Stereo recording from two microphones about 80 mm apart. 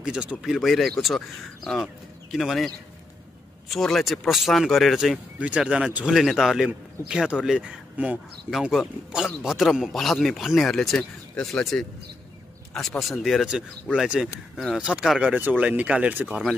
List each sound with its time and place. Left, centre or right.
0.0 s a man's voice: centre
3.7 s a man's voice: centre
5.4 s speech: centre
8.5 s a man's voice: centre